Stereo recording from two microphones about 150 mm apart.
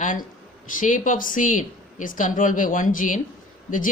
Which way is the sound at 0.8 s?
60° left (ahead or behind).